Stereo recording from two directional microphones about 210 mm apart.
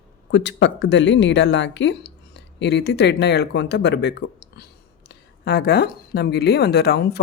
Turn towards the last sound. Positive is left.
turn(degrees=50)  # may be behind; listen again after turning